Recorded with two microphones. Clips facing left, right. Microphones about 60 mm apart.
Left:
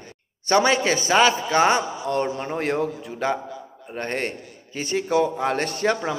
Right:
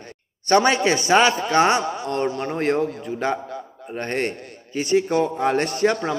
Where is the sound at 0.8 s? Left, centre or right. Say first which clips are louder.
Right 1 dB; centre.